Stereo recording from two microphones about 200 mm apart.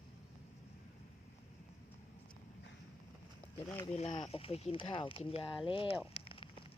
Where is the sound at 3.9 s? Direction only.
35° left (ahead or behind).